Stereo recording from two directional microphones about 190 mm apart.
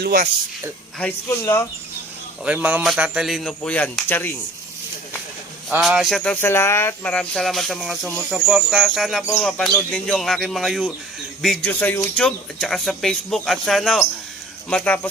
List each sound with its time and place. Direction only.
0.0 s speech: 50° right (ahead or behind)
0.9 s speech: 10° left (ahead or behind)
2.4 s speech: 5° right (ahead or behind); by 4.3 s 10° left (ahead or behind)
5.8 s speech: centre (ahead or behind)